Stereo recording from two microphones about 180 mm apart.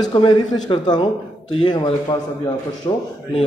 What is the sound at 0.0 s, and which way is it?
A man's voice, 25° left (ahead or behind).